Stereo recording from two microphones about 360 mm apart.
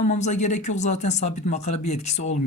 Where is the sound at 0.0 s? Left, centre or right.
Centre.